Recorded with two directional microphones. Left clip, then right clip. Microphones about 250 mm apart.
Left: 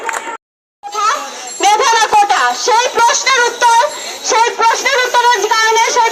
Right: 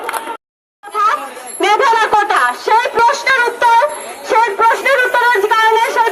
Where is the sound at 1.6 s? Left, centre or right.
Right.